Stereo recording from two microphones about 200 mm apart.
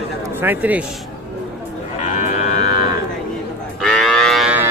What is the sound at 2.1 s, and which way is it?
Livestock, 35° left (ahead or behind).